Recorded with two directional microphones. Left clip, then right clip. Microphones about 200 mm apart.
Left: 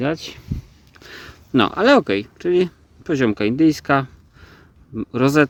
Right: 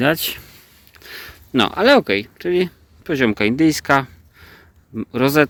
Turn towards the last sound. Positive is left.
turn(degrees=30)  # may be behind; listen again after turning